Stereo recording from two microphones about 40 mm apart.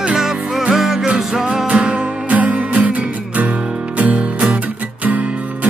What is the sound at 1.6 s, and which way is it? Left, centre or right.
Music, right.